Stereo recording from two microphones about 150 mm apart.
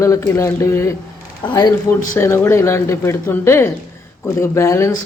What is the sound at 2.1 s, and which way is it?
Speech, 15° left (ahead or behind).